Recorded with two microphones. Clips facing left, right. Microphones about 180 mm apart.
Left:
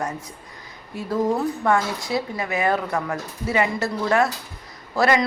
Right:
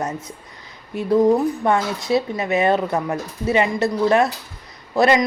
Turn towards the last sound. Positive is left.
turn(degrees=-20)  # may be behind; listen again after turning